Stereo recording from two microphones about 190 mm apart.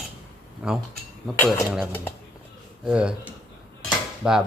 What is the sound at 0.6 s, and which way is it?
Speech, 5° right (ahead or behind).